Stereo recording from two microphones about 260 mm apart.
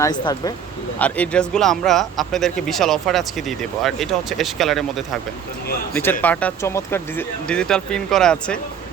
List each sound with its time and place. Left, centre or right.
0.0 s a man's voice: centre